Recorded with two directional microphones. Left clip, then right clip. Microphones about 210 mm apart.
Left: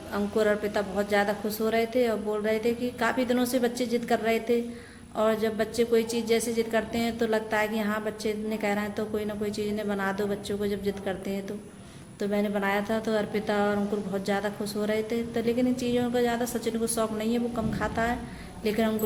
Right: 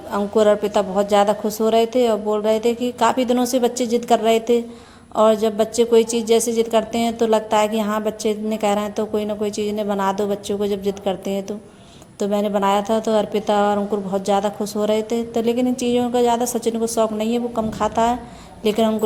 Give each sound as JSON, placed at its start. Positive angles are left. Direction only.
{"t": 0.1, "sound": "a woman's voice", "side_deg": -30}